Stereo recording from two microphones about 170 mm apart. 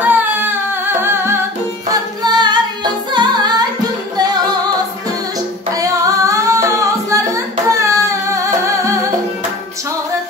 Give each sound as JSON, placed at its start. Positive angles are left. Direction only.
{"t": 0.0, "sound": "singing", "side_deg": -10}
{"t": 1.0, "sound": "humming", "side_deg": -15}
{"t": 2.2, "sound": "singing", "side_deg": -25}
{"t": 3.1, "sound": "music", "side_deg": -25}
{"t": 5.7, "sound": "singing", "side_deg": -20}